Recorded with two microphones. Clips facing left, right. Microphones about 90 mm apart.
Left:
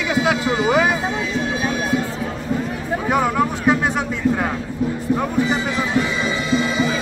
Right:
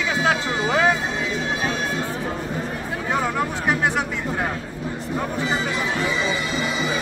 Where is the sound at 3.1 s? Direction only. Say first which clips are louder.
Left 4 dB; 15° left (ahead or behind).